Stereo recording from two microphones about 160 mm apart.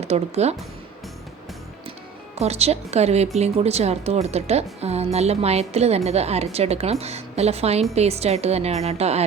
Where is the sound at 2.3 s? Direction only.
40° right (ahead or behind).